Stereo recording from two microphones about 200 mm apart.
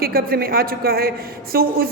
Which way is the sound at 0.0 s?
50° right (ahead or behind).